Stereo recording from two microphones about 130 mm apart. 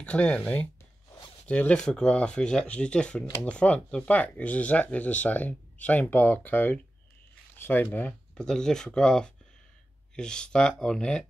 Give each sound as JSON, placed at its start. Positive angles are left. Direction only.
{"t": 0.0, "sound": "speech", "side_deg": 10}